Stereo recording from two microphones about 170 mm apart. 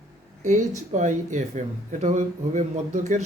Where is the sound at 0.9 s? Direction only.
45° right (ahead or behind).